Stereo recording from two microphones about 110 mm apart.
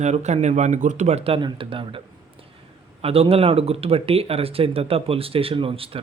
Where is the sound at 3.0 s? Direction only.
65° right (ahead or behind).